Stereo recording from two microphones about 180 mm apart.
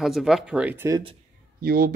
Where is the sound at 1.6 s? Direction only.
55° right (ahead or behind).